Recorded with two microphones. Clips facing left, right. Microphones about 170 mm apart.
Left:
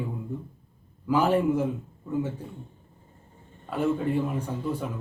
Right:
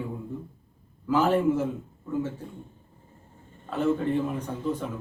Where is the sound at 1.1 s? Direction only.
15° left (ahead or behind).